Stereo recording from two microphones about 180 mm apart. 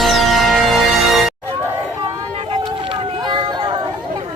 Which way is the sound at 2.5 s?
30° right (ahead or behind).